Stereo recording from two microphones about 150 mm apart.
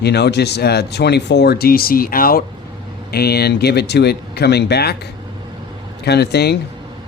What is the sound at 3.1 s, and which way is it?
Speech, 90° left.